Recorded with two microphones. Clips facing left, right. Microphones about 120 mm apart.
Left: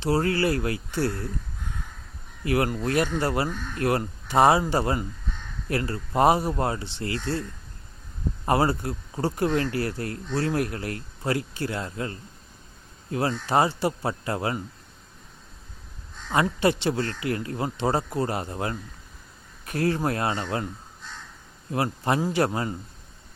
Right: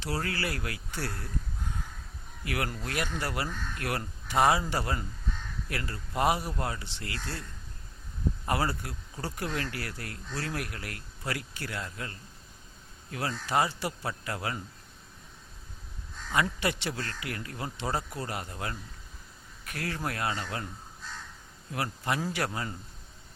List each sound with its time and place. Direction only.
0.0 s speech: 30° left (ahead or behind)
2.4 s speech: 30° left (ahead or behind)
8.4 s speech: 30° left (ahead or behind)
16.3 s speech: 30° left (ahead or behind)
21.7 s speech: 30° left (ahead or behind)